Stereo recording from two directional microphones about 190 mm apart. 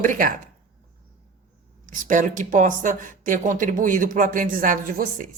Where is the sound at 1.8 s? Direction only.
45° right (ahead or behind).